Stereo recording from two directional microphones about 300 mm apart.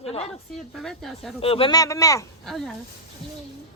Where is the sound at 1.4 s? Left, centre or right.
Centre.